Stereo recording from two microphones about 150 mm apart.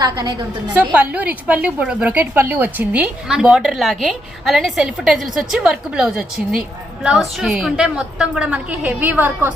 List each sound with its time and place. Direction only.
0.0 s a woman's voice: 25° right (ahead or behind)
0.9 s a woman's voice: 10° right (ahead or behind)